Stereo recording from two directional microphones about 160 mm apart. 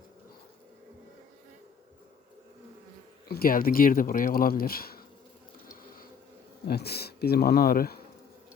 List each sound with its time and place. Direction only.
3.2 s speech: 70° left (ahead or behind)
6.7 s speech: 80° left